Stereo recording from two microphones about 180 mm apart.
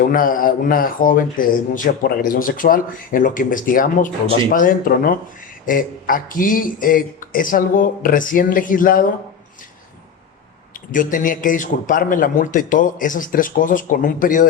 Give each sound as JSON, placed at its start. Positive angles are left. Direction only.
{"t": 0.1, "sound": "a man's voice", "side_deg": 50}
{"t": 10.9, "sound": "a man's voice", "side_deg": 45}